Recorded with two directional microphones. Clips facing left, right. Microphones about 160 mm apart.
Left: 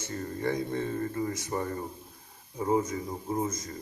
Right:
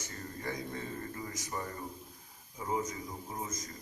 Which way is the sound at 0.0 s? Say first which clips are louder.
Left 9 dB; 30° left (ahead or behind).